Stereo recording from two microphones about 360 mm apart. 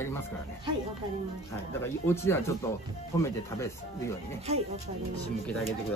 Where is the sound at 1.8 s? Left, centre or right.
Centre.